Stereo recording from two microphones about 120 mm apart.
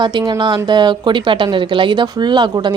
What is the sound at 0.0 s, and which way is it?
Speech, 40° right (ahead or behind).